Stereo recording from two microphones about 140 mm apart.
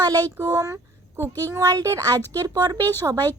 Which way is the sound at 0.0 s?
25° right (ahead or behind).